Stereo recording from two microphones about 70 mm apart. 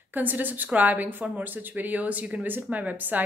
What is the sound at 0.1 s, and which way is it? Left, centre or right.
Speech, right.